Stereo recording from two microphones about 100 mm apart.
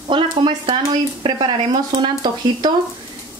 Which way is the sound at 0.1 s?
50° right (ahead or behind).